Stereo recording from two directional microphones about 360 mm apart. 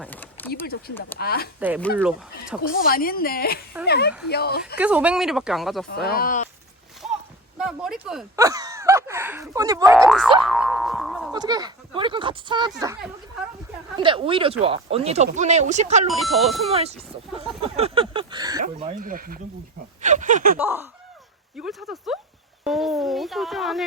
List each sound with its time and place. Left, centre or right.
0.0 s a sound: centre
0.6 s a woman's voice: left
1.5 s speech: centre
2.6 s a woman's voice: left
4.8 s speech: centre
5.9 s a woman's voice: left
7.6 s a sound: centre
10.0 s speech: centre
10.4 s boing: centre
11.3 s speech: centre
16.0 s speech: centre
16.6 s speech: centre
20.6 s speech: centre